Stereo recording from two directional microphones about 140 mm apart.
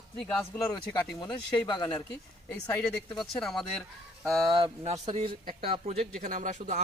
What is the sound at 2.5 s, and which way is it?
Speech, 5° left (ahead or behind).